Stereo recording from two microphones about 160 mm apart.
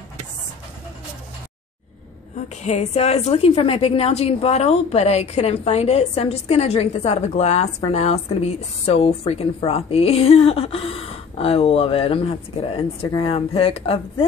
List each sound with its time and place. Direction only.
2.5 s a woman's voice: 45° left (ahead or behind)